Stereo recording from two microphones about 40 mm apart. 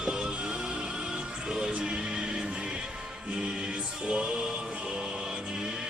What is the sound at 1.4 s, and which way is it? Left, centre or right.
Music, centre.